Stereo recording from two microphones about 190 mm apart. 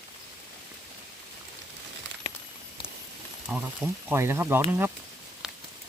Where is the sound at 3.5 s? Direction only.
5° right (ahead or behind).